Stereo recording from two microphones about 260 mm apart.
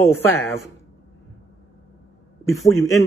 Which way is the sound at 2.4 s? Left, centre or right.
Centre.